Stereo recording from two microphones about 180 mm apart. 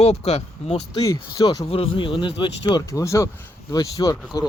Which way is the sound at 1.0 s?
20° left (ahead or behind).